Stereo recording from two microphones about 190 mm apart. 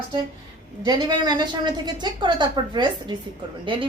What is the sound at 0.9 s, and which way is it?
A woman's voice, 20° right (ahead or behind).